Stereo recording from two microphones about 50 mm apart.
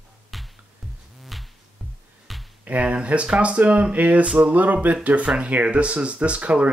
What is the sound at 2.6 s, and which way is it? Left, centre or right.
Speech, right.